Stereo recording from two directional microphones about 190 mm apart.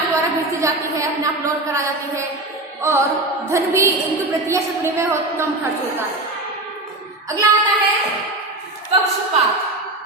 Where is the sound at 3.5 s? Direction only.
15° right (ahead or behind).